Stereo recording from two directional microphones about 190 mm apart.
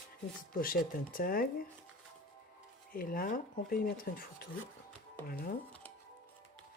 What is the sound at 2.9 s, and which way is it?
Speech, 50° left (ahead or behind).